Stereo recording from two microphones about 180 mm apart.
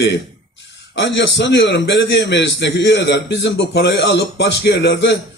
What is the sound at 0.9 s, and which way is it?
A man's voice, 80° left.